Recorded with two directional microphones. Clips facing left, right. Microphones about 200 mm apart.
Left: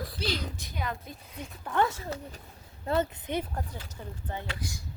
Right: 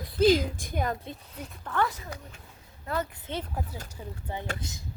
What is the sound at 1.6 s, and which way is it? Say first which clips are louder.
Speech: left 2 dB; 20° left (ahead or behind).